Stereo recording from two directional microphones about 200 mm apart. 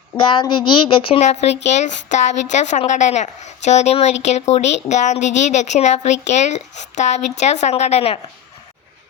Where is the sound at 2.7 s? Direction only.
35° left (ahead or behind).